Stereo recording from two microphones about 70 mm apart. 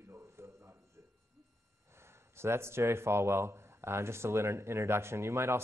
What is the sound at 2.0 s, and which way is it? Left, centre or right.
A man's voice, right.